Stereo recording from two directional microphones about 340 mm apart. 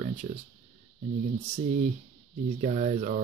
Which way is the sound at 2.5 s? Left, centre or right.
Right.